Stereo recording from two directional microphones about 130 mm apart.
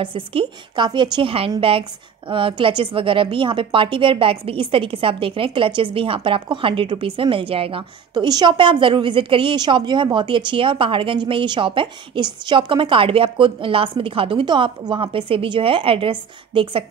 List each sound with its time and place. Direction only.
0.0 s a woman's voice: 45° right (ahead or behind)
8.1 s a woman's voice: 30° right (ahead or behind)